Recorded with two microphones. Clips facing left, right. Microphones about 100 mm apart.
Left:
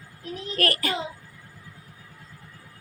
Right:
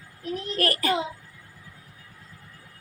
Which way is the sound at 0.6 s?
35° right (ahead or behind).